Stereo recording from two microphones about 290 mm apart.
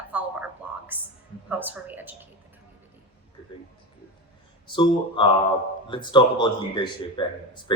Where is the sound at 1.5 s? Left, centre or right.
Centre.